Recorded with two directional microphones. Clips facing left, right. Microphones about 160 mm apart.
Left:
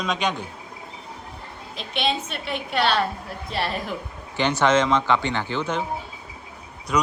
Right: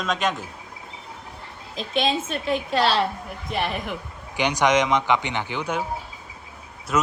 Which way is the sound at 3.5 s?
20° right (ahead or behind).